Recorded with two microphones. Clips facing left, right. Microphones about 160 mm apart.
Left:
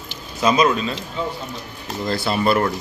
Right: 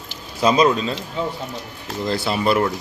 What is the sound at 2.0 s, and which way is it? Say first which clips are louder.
Speech: even; 15° right (ahead or behind).